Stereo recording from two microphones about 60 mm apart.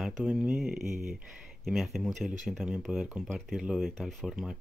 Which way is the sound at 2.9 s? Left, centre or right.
Centre.